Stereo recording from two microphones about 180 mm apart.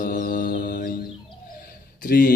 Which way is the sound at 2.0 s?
55° left (ahead or behind).